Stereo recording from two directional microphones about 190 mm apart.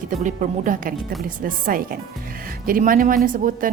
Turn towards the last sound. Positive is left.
turn(degrees=-45)  # may be behind; listen again after turning